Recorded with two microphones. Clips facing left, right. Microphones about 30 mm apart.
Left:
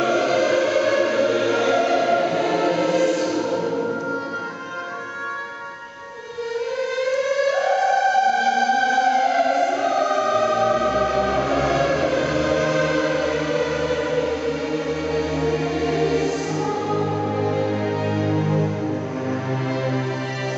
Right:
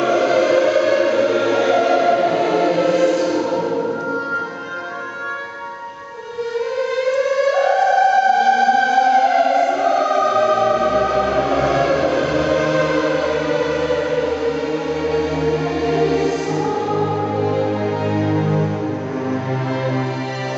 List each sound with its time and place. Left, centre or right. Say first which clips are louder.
0.0 s choir: right 3 dB; centre
7.1 s music: right 3 dB; centre